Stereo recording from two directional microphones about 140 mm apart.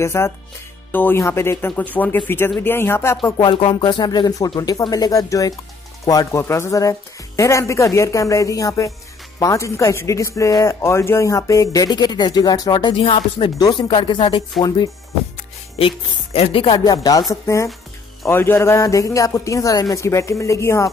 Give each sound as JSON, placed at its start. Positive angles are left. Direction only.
{"t": 0.0, "sound": "speech", "side_deg": 20}
{"t": 3.3, "sound": "speech", "side_deg": 35}
{"t": 16.3, "sound": "speech", "side_deg": 45}
{"t": 16.8, "sound": "speech", "side_deg": 25}